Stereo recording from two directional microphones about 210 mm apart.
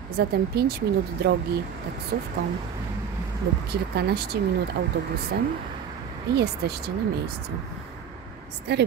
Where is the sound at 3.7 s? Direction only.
50° right (ahead or behind).